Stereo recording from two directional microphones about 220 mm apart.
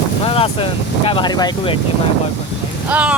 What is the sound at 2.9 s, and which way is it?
Speech, 5° right (ahead or behind).